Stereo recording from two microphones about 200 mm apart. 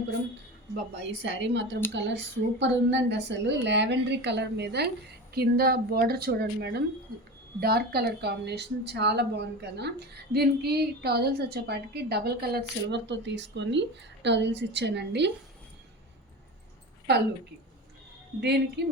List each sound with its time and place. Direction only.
0.9 s a woman's voice: 60° right (ahead or behind)
18.3 s a woman's voice: 55° right (ahead or behind)